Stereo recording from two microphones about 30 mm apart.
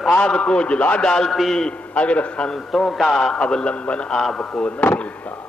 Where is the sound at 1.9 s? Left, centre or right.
Left.